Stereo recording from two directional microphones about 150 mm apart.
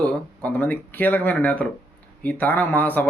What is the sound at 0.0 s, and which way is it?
Speech, 10° left (ahead or behind).